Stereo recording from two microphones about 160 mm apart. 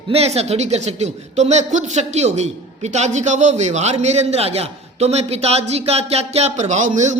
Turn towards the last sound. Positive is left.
turn(degrees=-50)  # may be behind; listen again after turning